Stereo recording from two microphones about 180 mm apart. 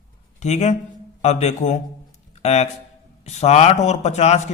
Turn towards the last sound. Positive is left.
turn(degrees=40)  # may be behind; listen again after turning